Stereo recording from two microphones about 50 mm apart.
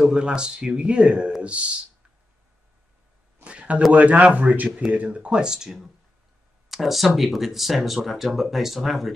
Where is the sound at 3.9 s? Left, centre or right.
Right.